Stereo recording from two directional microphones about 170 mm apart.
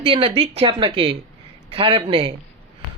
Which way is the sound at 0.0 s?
30° right (ahead or behind).